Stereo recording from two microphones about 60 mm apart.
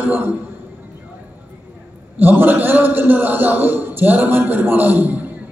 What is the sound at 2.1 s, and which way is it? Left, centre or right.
Speech, right.